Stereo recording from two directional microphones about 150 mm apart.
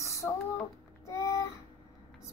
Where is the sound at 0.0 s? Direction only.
20° left (ahead or behind).